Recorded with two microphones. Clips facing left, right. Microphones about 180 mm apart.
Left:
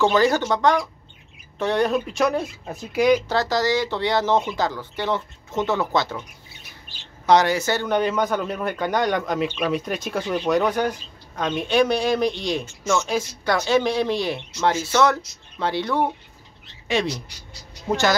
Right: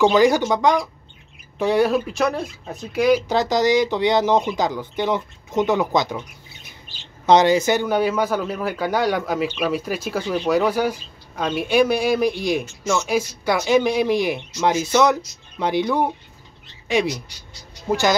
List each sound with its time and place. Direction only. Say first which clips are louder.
0.0 s a man's voice: right 3 dB; 15° right (ahead or behind)
3.3 s a man's voice: right 3 dB; 15° right (ahead or behind)
7.2 s a man's voice: right 3 dB; 20° right (ahead or behind)